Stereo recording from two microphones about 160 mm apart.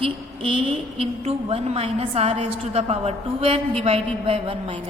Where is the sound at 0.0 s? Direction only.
35° right (ahead or behind).